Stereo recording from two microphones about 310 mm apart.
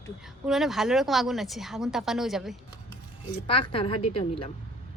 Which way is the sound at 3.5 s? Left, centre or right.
Centre.